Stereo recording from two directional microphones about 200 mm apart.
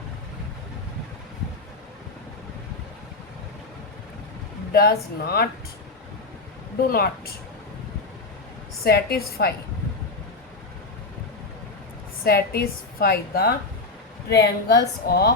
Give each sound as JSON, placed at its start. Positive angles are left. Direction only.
{"t": 4.7, "sound": "a woman's voice", "side_deg": 50}
{"t": 6.8, "sound": "a woman's voice", "side_deg": 50}
{"t": 8.8, "sound": "a woman's voice", "side_deg": 50}
{"t": 12.2, "sound": "a woman's voice", "side_deg": 50}